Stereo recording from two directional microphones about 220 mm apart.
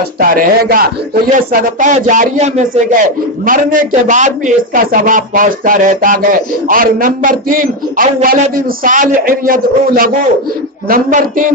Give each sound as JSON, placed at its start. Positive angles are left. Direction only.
{"t": 0.2, "sound": "speech", "side_deg": -40}